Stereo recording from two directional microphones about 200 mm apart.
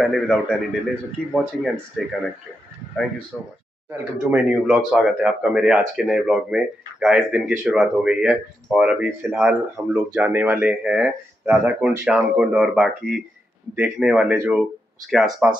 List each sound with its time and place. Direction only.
0.0 s speech: centre (ahead or behind)
3.3 s speech: 5° left (ahead or behind)
3.9 s speech: 10° right (ahead or behind)